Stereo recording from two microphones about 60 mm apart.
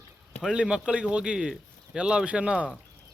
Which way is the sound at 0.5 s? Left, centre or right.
Centre.